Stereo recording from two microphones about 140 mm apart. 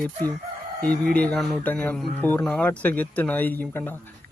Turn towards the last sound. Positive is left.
turn(degrees=15)  # may be behind; listen again after turning